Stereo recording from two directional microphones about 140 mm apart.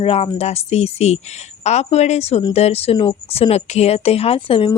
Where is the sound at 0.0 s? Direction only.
45° left (ahead or behind).